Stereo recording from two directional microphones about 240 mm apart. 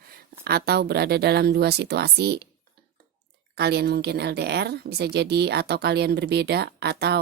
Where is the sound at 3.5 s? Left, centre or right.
Right.